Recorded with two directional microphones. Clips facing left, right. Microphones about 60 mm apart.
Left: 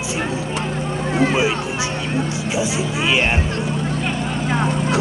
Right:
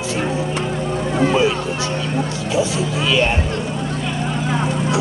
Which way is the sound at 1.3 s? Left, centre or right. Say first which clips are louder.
Right 2 dB; centre.